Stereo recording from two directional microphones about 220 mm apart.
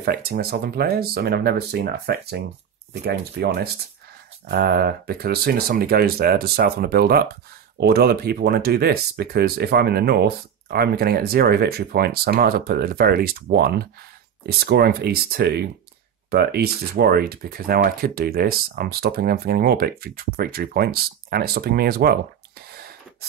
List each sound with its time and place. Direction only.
0.0 s speech: 45° right (ahead or behind)